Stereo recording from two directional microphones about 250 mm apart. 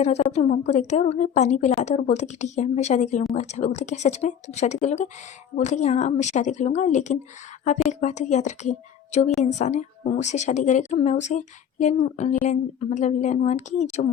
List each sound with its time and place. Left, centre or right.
0.0 s a woman's voice: left